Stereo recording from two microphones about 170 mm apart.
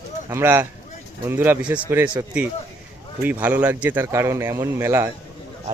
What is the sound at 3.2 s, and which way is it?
Speech, 10° right (ahead or behind).